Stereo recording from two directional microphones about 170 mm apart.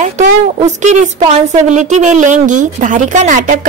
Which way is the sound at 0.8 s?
45° right (ahead or behind).